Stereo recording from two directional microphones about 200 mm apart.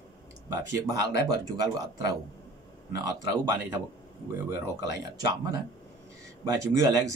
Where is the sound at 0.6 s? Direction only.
15° right (ahead or behind).